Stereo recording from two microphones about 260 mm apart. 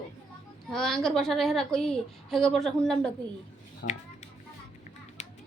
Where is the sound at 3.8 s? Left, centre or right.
Left.